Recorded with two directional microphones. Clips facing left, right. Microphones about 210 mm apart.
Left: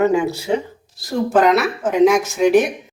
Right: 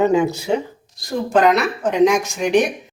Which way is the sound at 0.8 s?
5° left (ahead or behind).